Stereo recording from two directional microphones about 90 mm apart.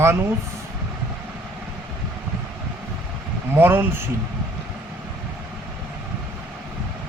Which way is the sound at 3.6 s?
25° right (ahead or behind).